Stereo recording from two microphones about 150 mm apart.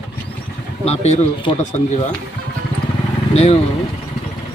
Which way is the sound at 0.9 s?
45° left (ahead or behind).